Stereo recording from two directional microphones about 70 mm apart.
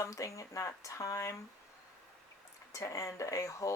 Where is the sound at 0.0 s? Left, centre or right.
Left.